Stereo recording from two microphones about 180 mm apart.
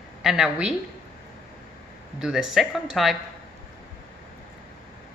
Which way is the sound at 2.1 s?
5° right (ahead or behind).